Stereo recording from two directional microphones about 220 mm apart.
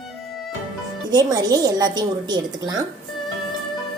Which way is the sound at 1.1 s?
15° right (ahead or behind).